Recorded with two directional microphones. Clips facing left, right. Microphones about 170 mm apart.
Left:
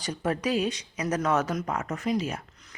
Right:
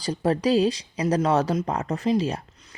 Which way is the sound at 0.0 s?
30° right (ahead or behind).